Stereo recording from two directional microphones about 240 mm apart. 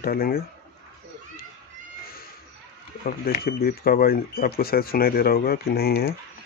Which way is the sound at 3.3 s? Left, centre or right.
Left.